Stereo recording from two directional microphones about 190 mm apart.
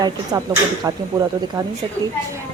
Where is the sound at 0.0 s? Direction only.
20° right (ahead or behind).